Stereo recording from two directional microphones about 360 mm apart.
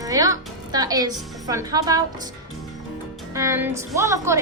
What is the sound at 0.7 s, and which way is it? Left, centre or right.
Speech, centre.